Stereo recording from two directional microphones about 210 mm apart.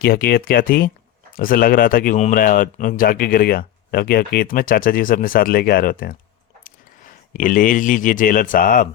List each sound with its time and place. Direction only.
0.0 s speech: 45° left (ahead or behind)